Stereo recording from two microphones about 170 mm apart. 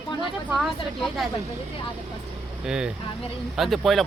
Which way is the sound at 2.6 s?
5° right (ahead or behind).